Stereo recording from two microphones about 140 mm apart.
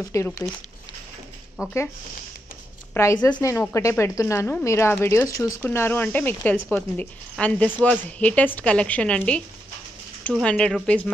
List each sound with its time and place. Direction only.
0.1 s speech: 20° left (ahead or behind)
1.6 s speech: 20° left (ahead or behind)
2.9 s a sound: 20° left (ahead or behind)
3.3 s a woman's voice: 20° left (ahead or behind); by 11.0 s 5° left (ahead or behind)